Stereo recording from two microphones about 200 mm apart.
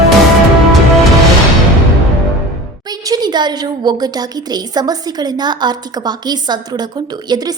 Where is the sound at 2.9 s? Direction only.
20° right (ahead or behind).